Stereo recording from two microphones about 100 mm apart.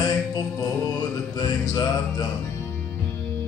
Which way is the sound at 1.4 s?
40° left (ahead or behind).